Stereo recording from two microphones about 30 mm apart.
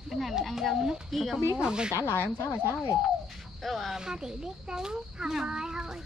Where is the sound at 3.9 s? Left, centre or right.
Right.